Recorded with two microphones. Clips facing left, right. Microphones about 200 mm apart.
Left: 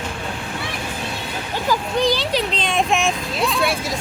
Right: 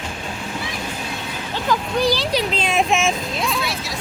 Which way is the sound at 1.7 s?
Centre (ahead or behind).